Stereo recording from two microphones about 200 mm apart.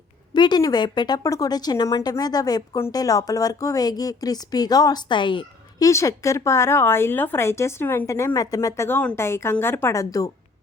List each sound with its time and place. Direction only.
0.3 s a woman's voice: 20° left (ahead or behind)